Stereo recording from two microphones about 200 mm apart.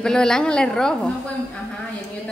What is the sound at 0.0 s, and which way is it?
Speech, 5° left (ahead or behind).